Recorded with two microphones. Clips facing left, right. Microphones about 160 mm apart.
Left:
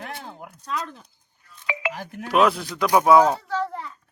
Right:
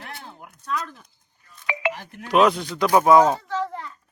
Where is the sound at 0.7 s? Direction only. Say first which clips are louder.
Right 1 dB; 25° left (ahead or behind).